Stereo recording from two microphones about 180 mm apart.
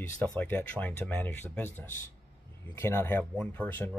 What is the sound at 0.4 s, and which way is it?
Speech, 10° left (ahead or behind).